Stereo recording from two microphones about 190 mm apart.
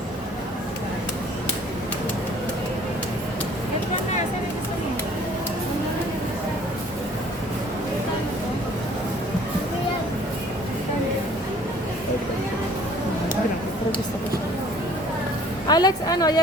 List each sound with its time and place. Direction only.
15.6 s vehicle: 20° left (ahead or behind)